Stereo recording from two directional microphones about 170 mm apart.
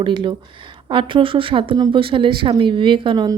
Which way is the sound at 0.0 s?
30° right (ahead or behind).